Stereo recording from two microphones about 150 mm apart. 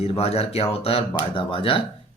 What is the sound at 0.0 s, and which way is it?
Speech, 45° left (ahead or behind).